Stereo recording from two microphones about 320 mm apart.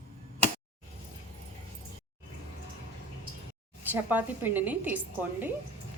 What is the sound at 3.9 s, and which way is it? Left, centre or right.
Speech, centre.